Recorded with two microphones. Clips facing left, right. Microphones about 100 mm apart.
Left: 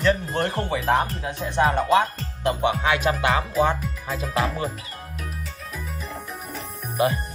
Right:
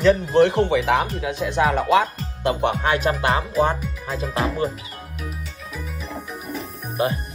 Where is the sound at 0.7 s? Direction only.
90° right.